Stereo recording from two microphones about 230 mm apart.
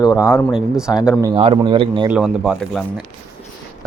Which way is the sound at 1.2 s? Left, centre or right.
Right.